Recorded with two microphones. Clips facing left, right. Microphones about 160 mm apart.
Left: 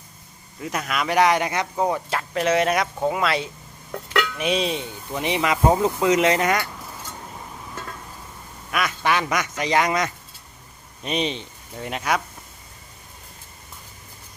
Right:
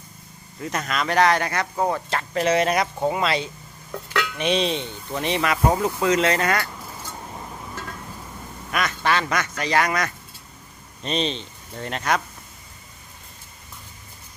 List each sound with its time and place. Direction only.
0.6 s speech: 5° left (ahead or behind)
8.7 s speech: 10° left (ahead or behind)